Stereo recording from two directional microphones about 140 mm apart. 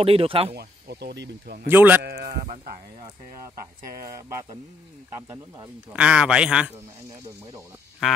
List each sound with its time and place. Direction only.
0.0 s speech: 40° right (ahead or behind)
1.7 s a man's voice: 15° right (ahead or behind)
4.0 s speech: 20° right (ahead or behind)
5.9 s a man's voice: 5° right (ahead or behind)